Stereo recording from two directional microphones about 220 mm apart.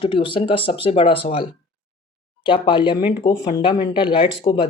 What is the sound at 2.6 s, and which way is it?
Speech, 20° left (ahead or behind).